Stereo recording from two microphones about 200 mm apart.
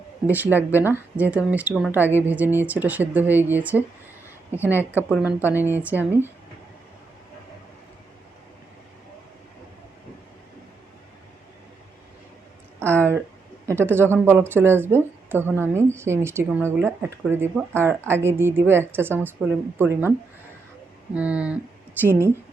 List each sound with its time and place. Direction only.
0.5 s a woman's voice: 10° right (ahead or behind)
12.8 s a sound: 10° right (ahead or behind)
13.7 s a woman's voice: 10° right (ahead or behind)
21.1 s a woman's voice: 5° right (ahead or behind)